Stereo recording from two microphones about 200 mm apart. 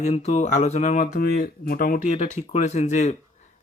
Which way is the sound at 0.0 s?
35° left (ahead or behind).